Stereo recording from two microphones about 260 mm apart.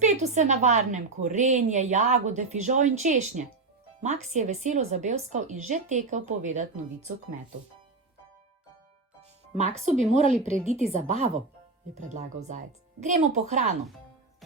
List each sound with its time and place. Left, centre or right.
0.0 s a woman's voice: right
9.6 s a woman's voice: right